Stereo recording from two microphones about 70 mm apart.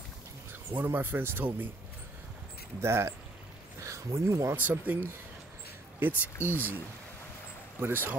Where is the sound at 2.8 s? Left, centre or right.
Right.